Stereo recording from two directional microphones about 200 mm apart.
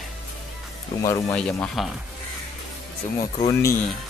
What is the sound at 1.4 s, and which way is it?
Speech, 5° left (ahead or behind).